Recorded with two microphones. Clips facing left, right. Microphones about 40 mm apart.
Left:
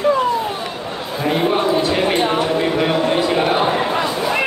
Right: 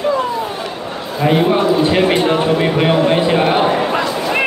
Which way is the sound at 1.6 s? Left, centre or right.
Right.